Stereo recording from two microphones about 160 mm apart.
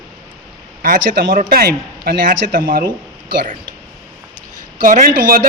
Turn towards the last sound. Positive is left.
turn(degrees=-60)  # may be behind; listen again after turning